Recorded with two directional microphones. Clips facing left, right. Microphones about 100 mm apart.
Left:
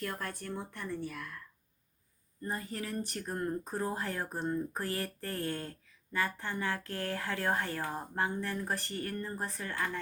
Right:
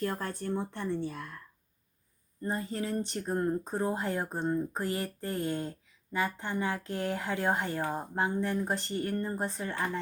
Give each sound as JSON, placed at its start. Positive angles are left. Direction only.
{"t": 0.0, "sound": "speech", "side_deg": -30}
{"t": 2.4, "sound": "speech", "side_deg": -25}